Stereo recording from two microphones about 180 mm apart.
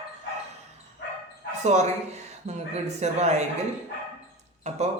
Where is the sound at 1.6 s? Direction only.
40° right (ahead or behind).